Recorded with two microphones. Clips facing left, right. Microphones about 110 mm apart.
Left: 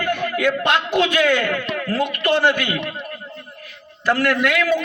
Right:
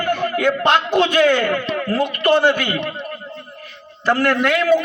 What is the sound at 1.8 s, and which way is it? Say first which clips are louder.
Speech: right 3 dB; 40° right (ahead or behind).